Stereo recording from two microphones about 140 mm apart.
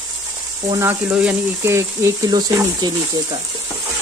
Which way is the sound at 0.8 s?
15° right (ahead or behind).